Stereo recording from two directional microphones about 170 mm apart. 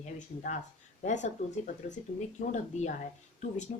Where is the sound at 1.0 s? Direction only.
45° left (ahead or behind).